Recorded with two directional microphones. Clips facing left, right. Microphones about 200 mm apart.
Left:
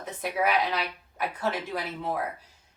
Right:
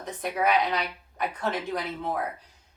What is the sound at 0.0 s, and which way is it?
A woman's voice, 5° left (ahead or behind).